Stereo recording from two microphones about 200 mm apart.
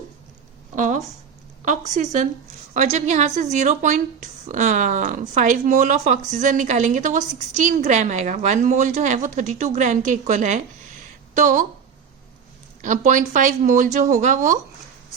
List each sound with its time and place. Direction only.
0.8 s a woman's voice: 35° right (ahead or behind)
12.8 s a woman's voice: 40° right (ahead or behind)